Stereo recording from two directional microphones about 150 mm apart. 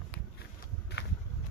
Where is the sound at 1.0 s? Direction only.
90° left.